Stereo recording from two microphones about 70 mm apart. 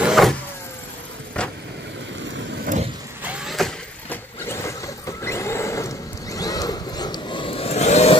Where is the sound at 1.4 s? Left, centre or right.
Centre.